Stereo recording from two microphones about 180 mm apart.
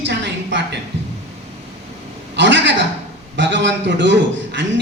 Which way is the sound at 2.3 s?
80° right.